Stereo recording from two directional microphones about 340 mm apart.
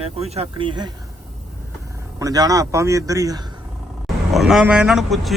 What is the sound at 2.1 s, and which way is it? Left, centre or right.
Speech, centre.